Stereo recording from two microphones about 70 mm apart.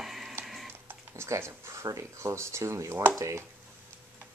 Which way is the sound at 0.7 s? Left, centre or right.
Right.